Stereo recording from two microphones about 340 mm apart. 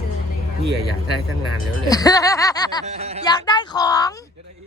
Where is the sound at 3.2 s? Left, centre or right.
Centre.